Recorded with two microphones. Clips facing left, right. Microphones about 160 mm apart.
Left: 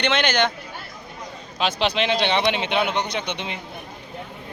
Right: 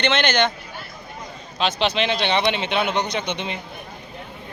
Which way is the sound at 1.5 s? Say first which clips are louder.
Right 1 dB; 5° left (ahead or behind).